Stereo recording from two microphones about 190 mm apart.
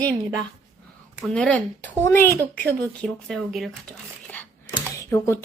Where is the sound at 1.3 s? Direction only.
5° left (ahead or behind).